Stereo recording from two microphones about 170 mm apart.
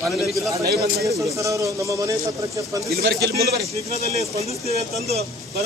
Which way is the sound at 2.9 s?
70° right (ahead or behind).